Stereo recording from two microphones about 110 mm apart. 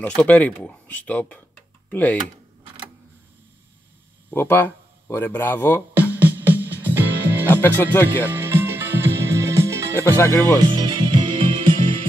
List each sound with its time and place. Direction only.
0.2 s speech: 10° left (ahead or behind)
4.3 s speech: 20° left (ahead or behind)
5.9 s music: 15° right (ahead or behind)
7.4 s speech: 20° left (ahead or behind)
8.3 s music: 20° right (ahead or behind)
9.9 s speech: 20° left (ahead or behind)
10.6 s music: 40° right (ahead or behind)